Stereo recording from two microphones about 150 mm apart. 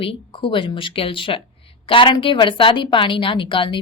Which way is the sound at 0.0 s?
35° left (ahead or behind).